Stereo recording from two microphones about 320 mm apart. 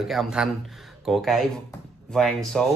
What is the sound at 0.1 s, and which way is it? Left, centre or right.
Speech, centre.